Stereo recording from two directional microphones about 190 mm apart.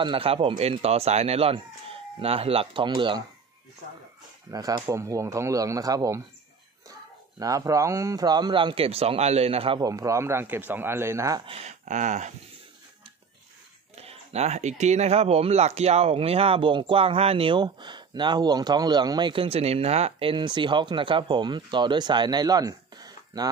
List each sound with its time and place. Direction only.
0.0 s speech: 25° right (ahead or behind)
4.5 s speech: 20° right (ahead or behind)
7.3 s speech: 15° right (ahead or behind)
9.8 s speech: 20° right (ahead or behind)
11.5 s speech: 40° right (ahead or behind)
13.9 s speech: 35° right (ahead or behind)